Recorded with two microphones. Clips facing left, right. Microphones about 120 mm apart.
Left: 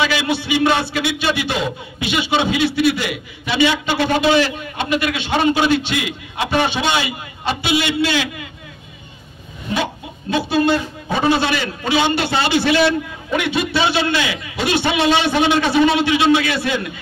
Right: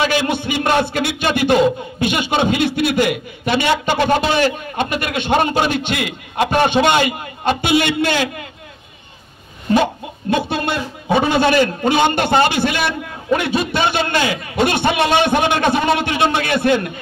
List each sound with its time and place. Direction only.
0.0 s a man's voice: 50° right (ahead or behind)
10.3 s a man's voice: 55° right (ahead or behind)